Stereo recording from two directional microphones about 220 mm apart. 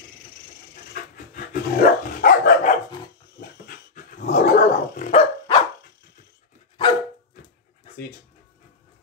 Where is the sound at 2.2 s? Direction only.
40° left (ahead or behind).